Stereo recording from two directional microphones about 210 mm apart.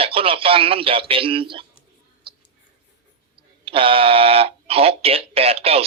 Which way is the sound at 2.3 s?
25° right (ahead or behind).